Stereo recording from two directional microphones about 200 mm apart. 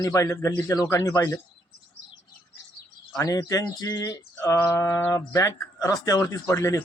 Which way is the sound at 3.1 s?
20° left (ahead or behind).